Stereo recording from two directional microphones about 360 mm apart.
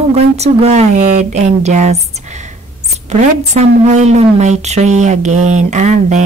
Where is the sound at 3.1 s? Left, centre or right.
Centre.